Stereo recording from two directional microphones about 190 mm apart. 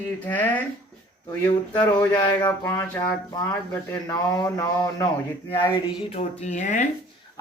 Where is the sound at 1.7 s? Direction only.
20° left (ahead or behind).